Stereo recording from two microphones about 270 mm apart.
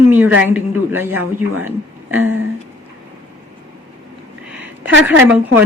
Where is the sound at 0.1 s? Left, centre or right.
Centre.